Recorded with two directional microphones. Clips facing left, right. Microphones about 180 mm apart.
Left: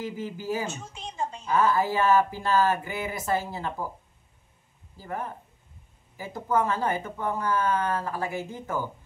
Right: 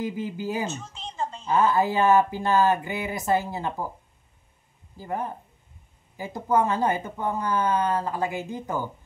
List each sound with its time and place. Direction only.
0.0 s speech: 20° right (ahead or behind)
0.7 s a sound: 15° left (ahead or behind)
1.4 s speech: 20° right (ahead or behind)
4.9 s speech: 20° right (ahead or behind)